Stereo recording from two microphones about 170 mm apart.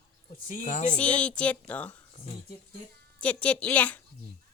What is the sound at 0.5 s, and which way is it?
Speech, 50° left (ahead or behind).